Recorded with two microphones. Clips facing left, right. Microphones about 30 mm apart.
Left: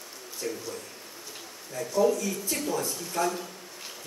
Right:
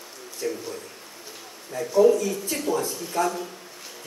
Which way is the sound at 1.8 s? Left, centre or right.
Centre.